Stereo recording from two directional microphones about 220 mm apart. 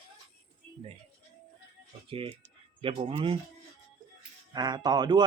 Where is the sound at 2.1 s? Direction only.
25° right (ahead or behind).